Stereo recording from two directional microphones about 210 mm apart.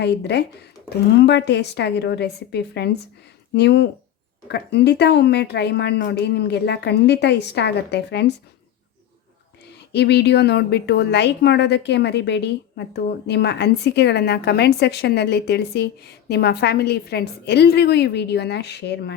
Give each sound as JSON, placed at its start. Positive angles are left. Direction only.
{"t": 0.0, "sound": "a woman's voice", "side_deg": 55}
{"t": 9.9, "sound": "a woman's voice", "side_deg": 55}